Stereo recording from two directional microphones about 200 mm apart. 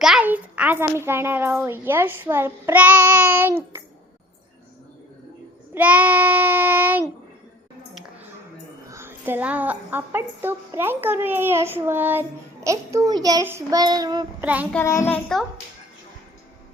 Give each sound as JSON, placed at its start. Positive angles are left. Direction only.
{"t": 0.0, "sound": "a child's voice", "side_deg": -5}
{"t": 5.7, "sound": "a child's voice", "side_deg": -10}
{"t": 8.9, "sound": "a child's voice", "side_deg": -10}
{"t": 14.4, "sound": "a child's voice", "side_deg": -5}
{"t": 14.7, "sound": "a child's voice", "side_deg": 10}